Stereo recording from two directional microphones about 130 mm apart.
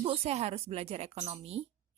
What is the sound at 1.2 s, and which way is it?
Speech, 40° right (ahead or behind).